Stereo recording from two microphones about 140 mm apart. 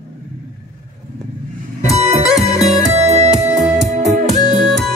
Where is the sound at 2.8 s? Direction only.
50° right (ahead or behind).